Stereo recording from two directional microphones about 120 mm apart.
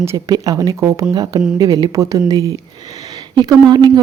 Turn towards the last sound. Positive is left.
turn(degrees=-35)  # may be behind; listen again after turning